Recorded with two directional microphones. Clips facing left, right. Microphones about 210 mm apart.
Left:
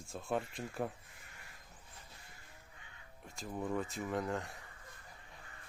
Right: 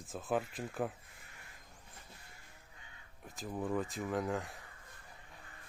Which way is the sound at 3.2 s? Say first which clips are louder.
Right 1 dB; centre (ahead or behind).